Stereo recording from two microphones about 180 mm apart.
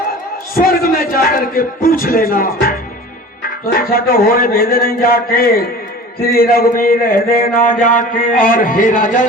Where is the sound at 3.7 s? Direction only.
55° left (ahead or behind).